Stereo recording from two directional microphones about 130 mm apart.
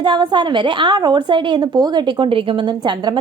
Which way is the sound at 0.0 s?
35° right (ahead or behind).